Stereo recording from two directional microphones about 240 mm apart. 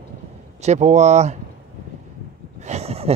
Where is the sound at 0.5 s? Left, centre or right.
Right.